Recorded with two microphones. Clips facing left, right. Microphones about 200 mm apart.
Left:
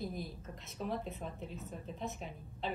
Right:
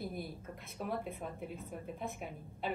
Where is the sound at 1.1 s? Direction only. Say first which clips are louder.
Right 1 dB; 10° right (ahead or behind).